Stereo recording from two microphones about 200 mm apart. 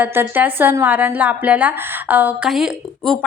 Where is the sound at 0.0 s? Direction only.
10° right (ahead or behind).